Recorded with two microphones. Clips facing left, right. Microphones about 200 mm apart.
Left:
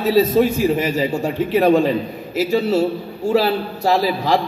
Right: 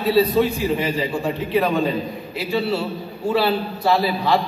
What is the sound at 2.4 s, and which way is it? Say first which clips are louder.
A man's voice: left 6 dB; 45° left (ahead or behind).